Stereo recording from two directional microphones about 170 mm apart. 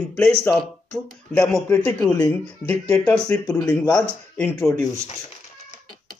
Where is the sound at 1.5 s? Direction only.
5° left (ahead or behind).